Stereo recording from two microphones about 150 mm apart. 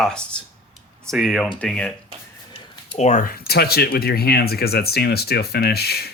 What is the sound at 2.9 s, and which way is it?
Speech, 50° left (ahead or behind).